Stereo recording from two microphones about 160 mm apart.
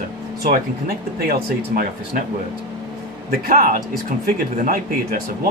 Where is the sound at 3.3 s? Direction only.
65° right (ahead or behind).